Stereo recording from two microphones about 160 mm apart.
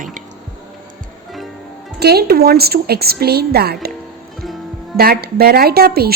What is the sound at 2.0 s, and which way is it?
A woman's voice, 80° right.